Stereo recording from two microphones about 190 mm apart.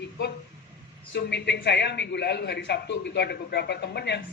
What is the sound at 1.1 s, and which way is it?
A man's voice, 60° left (ahead or behind).